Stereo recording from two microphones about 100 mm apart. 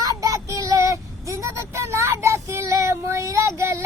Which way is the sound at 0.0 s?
35° right (ahead or behind).